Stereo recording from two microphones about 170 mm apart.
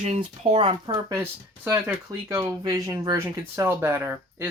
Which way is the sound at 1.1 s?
20° right (ahead or behind).